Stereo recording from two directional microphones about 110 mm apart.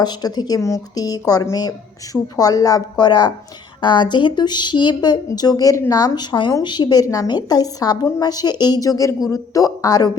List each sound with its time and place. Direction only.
0.0 s a woman's voice: 40° left (ahead or behind)
6.1 s a woman's voice: 45° left (ahead or behind)